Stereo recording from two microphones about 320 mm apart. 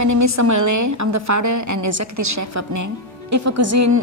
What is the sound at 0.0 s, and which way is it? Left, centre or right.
A woman's voice, right.